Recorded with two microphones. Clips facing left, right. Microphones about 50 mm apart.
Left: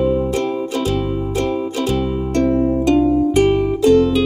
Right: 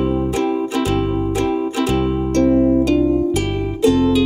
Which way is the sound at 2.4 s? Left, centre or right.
Centre.